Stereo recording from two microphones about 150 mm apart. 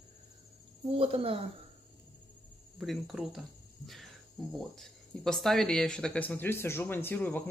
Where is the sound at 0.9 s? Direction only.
40° right (ahead or behind).